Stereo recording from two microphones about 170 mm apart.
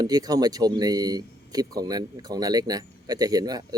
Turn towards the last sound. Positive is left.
turn(degrees=-20)  # may be behind; listen again after turning